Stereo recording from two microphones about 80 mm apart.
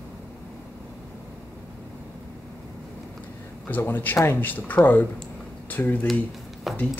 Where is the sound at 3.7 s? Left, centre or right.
Left.